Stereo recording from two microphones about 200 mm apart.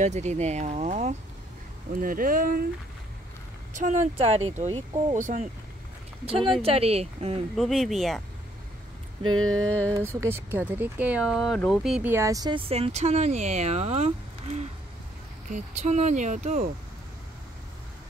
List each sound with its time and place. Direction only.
0.0 s speech: 35° right (ahead or behind)
3.7 s speech: 40° right (ahead or behind)
6.2 s speech: 30° right (ahead or behind)
7.5 s speech: centre (ahead or behind)
9.2 s speech: 90° right
9.5 s a sound: 5° left (ahead or behind)
9.9 s speech: 15° right (ahead or behind); by 16.7 s 35° right (ahead or behind)